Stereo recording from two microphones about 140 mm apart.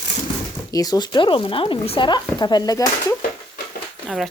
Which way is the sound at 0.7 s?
25° left (ahead or behind).